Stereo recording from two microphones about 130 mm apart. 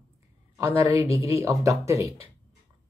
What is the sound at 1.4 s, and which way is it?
Speech, 25° right (ahead or behind).